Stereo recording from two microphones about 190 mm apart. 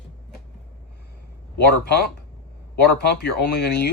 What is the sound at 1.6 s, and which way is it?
Speech, 60° left (ahead or behind).